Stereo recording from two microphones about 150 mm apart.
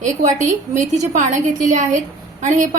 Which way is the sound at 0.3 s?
55° right (ahead or behind).